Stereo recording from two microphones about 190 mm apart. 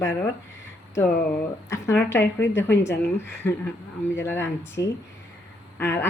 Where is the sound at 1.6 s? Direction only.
15° left (ahead or behind).